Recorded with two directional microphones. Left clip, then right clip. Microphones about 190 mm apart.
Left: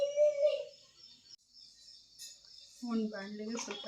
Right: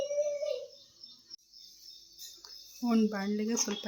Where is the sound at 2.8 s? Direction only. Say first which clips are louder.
Right 8 dB; 60° right (ahead or behind).